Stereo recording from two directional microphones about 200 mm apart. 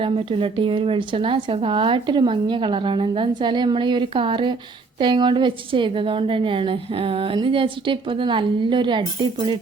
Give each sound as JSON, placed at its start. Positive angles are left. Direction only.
{"t": 0.0, "sound": "a woman's voice", "side_deg": -25}